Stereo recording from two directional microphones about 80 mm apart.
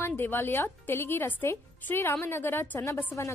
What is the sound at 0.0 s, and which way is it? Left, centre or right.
A woman's voice, left.